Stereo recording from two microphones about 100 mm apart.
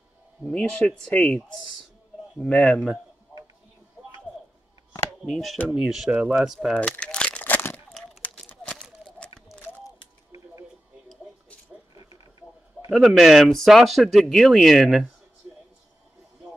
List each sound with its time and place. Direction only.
0.5 s speech: 10° left (ahead or behind)
5.2 s speech: centre (ahead or behind)
6.1 s speech: 15° right (ahead or behind)
6.4 s speech: 5° right (ahead or behind)
6.7 s crumpling: 10° left (ahead or behind)
7.9 s crumpling: 5° left (ahead or behind)
8.5 s a sound: 10° left (ahead or behind)
11.7 s a sound: 20° right (ahead or behind)
12.9 s speech: 5° right (ahead or behind)